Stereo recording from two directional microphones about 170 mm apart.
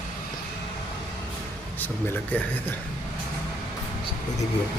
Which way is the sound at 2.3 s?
10° left (ahead or behind).